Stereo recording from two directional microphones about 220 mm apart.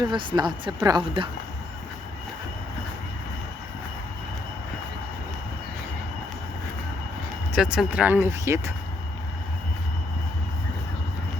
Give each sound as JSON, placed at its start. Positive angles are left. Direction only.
{"t": 0.0, "sound": "speech", "side_deg": -20}
{"t": 7.5, "sound": "speech", "side_deg": -5}